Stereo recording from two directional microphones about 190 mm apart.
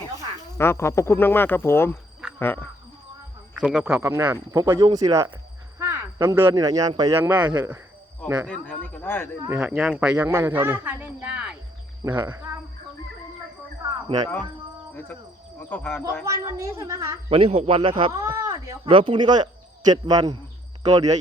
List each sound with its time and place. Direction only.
0.6 s speech: 15° left (ahead or behind)
3.5 s a man's voice: 5° right (ahead or behind)
7.4 s speech: 20° right (ahead or behind)
8.4 s speech: 5° left (ahead or behind)
9.5 s a man's voice: 10° right (ahead or behind)
14.9 s cricket: 10° left (ahead or behind)
15.7 s speech: 10° left (ahead or behind)
16.2 s a man's voice: 15° right (ahead or behind)
17.2 s speech: 30° right (ahead or behind)
18.2 s speech: 15° right (ahead or behind)
18.9 s speech: 25° right (ahead or behind)